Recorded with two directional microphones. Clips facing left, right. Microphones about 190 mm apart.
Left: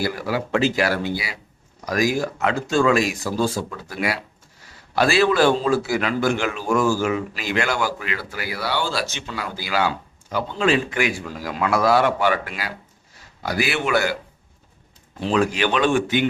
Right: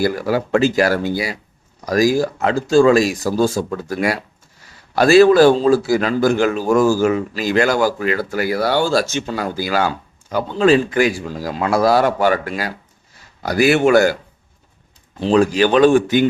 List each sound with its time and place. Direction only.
0.0 s a man's voice: 45° right (ahead or behind)
15.2 s a man's voice: 35° right (ahead or behind)